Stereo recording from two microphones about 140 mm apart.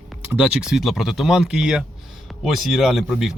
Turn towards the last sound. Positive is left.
turn(degrees=0)  # may be behind; listen again after turning